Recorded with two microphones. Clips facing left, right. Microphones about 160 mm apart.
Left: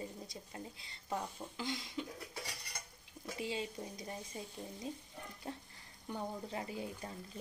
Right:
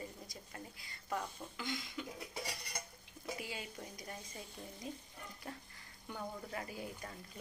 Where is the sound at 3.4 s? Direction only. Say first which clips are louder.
Left 6 dB; 25° left (ahead or behind).